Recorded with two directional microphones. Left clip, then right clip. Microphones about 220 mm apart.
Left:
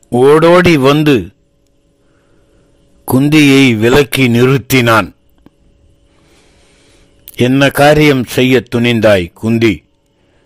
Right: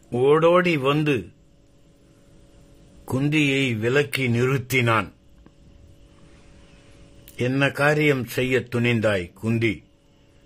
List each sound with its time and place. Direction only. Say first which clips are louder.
0.1 s speech: left 11 dB; 35° left (ahead or behind)
3.1 s speech: left 14 dB; 35° left (ahead or behind)
7.2 s speech: left 12 dB; 35° left (ahead or behind)